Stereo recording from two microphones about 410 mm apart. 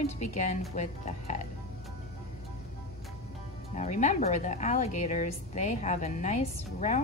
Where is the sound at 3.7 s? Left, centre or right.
Centre.